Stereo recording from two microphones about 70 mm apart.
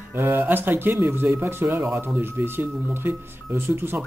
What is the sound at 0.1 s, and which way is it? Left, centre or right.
Speech, right.